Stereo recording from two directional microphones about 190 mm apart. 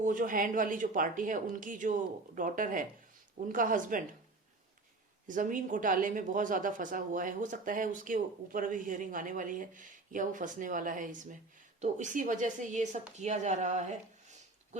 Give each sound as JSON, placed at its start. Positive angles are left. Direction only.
{"t": 0.0, "sound": "speech", "side_deg": -45}
{"t": 5.3, "sound": "a woman's voice", "side_deg": -45}